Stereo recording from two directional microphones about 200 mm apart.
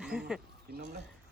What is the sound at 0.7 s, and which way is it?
Speech, 50° right (ahead or behind).